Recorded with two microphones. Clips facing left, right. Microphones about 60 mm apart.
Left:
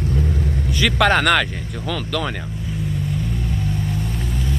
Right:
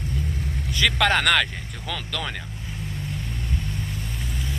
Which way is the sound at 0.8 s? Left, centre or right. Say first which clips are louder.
Left 4 dB; centre.